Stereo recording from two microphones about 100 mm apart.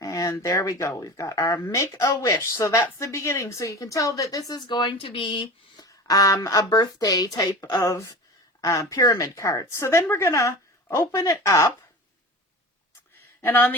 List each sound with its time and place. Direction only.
0.0 s a woman's voice: 35° left (ahead or behind)
4.8 s speech: 55° left (ahead or behind)
5.8 s a woman's voice: 35° left (ahead or behind)
13.1 s a sound: 20° left (ahead or behind)